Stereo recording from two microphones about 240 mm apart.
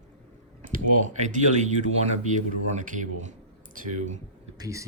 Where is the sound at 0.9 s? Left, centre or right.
Right.